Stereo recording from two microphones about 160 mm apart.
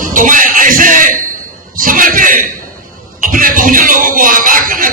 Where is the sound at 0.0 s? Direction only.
55° right (ahead or behind).